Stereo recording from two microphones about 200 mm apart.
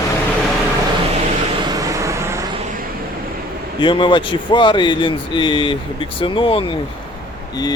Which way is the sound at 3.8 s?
25° left (ahead or behind).